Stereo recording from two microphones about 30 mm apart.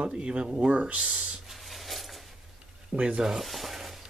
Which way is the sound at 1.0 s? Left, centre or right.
Right.